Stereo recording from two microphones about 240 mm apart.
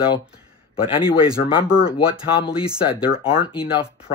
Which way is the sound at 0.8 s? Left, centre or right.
Left.